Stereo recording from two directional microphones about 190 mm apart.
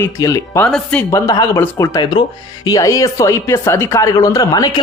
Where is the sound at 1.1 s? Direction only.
15° left (ahead or behind).